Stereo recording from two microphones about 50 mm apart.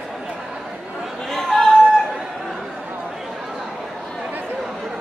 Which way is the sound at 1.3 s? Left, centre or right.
Centre.